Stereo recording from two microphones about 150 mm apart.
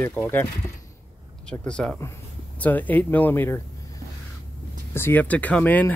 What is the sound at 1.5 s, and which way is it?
Speech, 5° left (ahead or behind).